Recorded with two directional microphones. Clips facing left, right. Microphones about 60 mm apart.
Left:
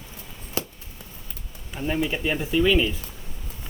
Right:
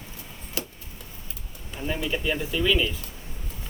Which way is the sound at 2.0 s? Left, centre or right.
Left.